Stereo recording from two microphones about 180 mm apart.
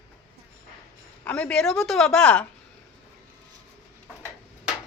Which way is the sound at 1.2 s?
5° left (ahead or behind).